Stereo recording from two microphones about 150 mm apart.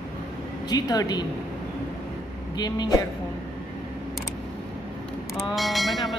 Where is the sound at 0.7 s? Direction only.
25° left (ahead or behind).